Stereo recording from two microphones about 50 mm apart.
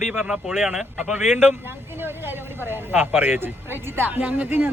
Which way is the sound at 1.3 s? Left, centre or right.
Right.